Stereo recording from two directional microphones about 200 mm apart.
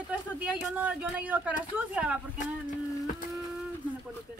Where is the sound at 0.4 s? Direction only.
5° right (ahead or behind).